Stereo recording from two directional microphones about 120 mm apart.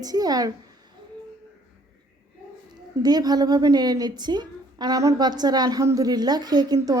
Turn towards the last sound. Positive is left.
turn(degrees=-30)  # may be behind; listen again after turning